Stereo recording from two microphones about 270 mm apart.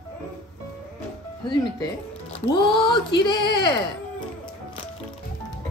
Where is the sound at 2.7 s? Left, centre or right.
Centre.